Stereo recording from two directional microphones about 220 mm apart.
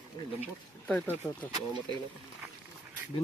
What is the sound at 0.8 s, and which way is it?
Speech, 5° left (ahead or behind).